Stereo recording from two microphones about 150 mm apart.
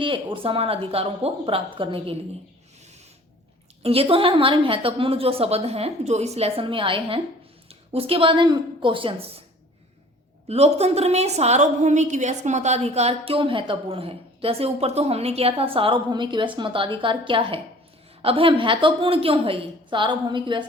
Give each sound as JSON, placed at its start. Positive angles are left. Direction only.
{"t": 0.0, "sound": "a woman's voice", "side_deg": -35}
{"t": 3.8, "sound": "a woman's voice", "side_deg": -40}
{"t": 10.5, "sound": "a woman's voice", "side_deg": -45}